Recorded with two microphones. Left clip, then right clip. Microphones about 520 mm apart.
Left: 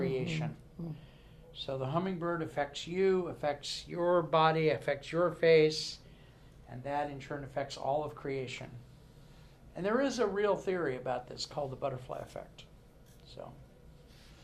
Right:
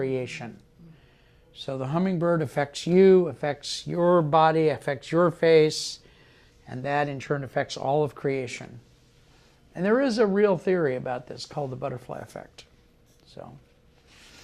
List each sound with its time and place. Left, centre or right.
0.0 s a sound: right
1.5 s speech: right
6.7 s speech: right
9.7 s speech: right